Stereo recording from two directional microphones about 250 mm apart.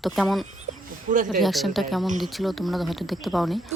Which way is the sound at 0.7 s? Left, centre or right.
Right.